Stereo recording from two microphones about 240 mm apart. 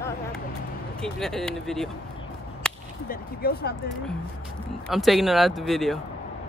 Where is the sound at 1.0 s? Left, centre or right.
Centre.